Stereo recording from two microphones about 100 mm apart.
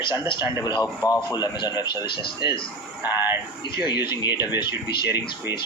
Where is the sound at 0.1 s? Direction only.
45° left (ahead or behind).